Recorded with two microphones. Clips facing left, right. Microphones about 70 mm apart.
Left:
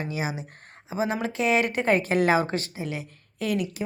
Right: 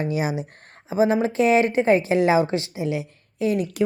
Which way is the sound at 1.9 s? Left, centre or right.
Left.